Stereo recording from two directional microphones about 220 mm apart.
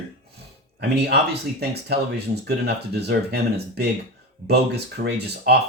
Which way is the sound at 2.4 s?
50° right (ahead or behind).